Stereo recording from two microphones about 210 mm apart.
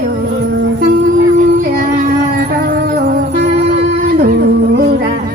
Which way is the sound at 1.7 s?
45° right (ahead or behind).